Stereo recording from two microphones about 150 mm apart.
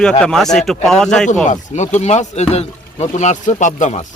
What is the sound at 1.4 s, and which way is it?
Speech, 55° left (ahead or behind).